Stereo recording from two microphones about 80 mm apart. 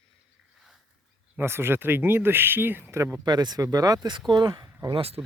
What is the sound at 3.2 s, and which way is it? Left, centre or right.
Speech, right.